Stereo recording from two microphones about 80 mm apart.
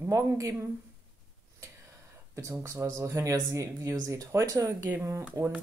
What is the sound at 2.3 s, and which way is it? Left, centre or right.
Speech, right.